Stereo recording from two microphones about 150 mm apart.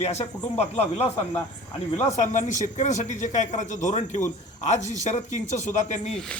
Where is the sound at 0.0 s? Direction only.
45° left (ahead or behind).